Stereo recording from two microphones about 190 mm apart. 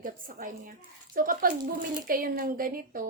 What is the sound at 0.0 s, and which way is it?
Speech, 45° right (ahead or behind).